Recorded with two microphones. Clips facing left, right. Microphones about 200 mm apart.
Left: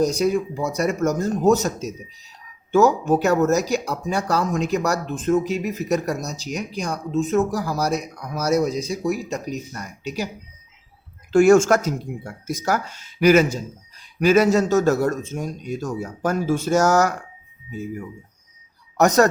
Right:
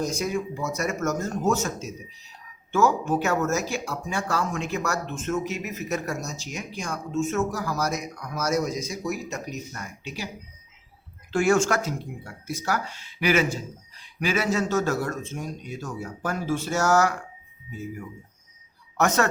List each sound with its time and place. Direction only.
0.0 s speech: 35° left (ahead or behind)
11.3 s speech: 45° left (ahead or behind)
18.9 s speech: 40° left (ahead or behind)